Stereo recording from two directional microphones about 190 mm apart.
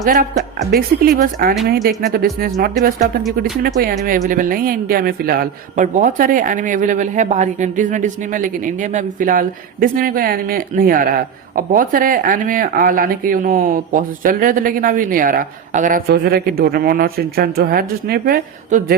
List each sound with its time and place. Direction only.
0.0 s speech: 45° right (ahead or behind)
3.8 s speech: 50° right (ahead or behind)